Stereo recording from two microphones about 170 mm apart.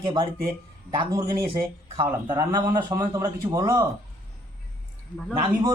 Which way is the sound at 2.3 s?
20° right (ahead or behind).